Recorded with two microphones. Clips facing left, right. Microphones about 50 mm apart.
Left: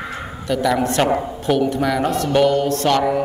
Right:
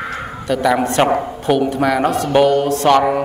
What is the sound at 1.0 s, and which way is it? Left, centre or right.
Speech, right.